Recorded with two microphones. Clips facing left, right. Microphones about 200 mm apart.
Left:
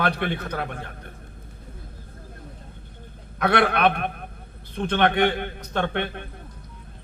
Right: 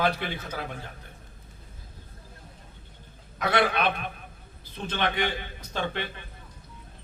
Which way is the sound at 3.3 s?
60° left (ahead or behind).